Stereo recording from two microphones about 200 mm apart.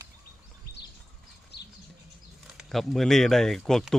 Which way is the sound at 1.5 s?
55° left (ahead or behind).